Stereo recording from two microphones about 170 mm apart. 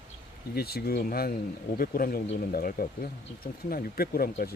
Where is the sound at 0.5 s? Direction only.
65° left (ahead or behind).